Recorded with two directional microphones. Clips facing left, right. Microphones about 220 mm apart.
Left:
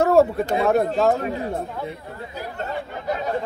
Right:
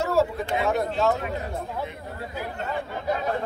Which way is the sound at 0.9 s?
35° left (ahead or behind).